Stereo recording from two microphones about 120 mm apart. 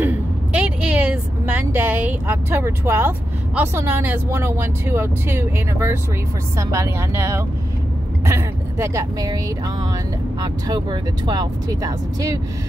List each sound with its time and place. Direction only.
0.0 s a woman's voice: 15° right (ahead or behind)
10.4 s speech: 35° right (ahead or behind)